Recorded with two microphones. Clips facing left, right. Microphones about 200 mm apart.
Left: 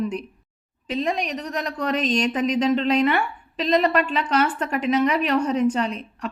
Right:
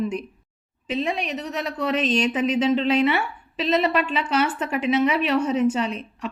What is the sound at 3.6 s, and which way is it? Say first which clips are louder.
Speech: left 1 dB; 40° left (ahead or behind).